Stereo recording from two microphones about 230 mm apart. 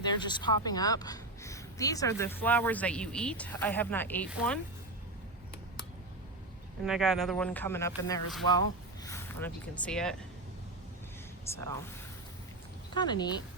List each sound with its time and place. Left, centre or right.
0.0 s a woman's voice: centre
6.8 s a woman's voice: centre
11.4 s a woman's voice: centre
12.9 s speech: centre